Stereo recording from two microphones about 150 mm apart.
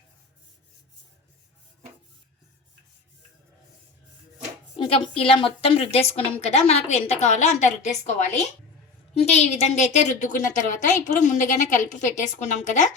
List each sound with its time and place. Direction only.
4.8 s a woman's voice: 40° left (ahead or behind)